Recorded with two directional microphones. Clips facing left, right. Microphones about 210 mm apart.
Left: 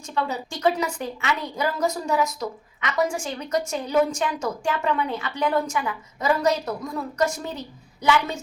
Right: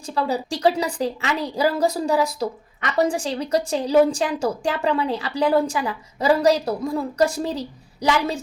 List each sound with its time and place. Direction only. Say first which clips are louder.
0.0 s a woman's voice: right 4 dB; 35° right (ahead or behind)